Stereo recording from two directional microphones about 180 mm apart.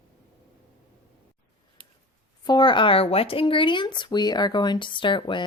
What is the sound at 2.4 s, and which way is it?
Speech, 25° left (ahead or behind).